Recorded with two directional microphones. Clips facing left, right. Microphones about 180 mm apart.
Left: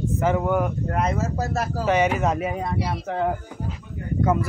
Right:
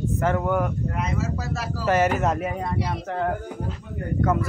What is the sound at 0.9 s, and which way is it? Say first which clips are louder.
Speech: left 3 dB; 50° left (ahead or behind).